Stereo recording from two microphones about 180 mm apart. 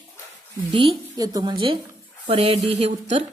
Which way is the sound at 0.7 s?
30° right (ahead or behind).